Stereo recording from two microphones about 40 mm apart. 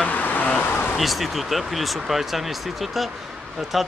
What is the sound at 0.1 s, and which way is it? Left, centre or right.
Vehicle, left.